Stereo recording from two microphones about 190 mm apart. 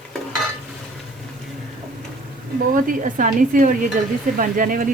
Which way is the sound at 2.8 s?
45° right (ahead or behind).